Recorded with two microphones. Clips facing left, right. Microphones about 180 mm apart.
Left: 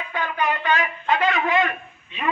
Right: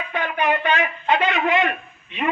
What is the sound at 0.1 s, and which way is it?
A man's voice, 20° right (ahead or behind).